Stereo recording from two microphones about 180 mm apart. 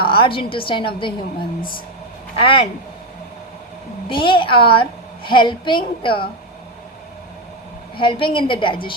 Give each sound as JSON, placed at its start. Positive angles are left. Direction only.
{"t": 0.0, "sound": "a woman's voice", "side_deg": 30}
{"t": 2.3, "sound": "a woman's voice", "side_deg": 30}
{"t": 4.1, "sound": "a woman's voice", "side_deg": 30}
{"t": 7.9, "sound": "a woman's voice", "side_deg": 30}